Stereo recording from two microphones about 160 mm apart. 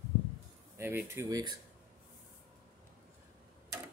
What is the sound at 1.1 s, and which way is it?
Speech, 20° right (ahead or behind).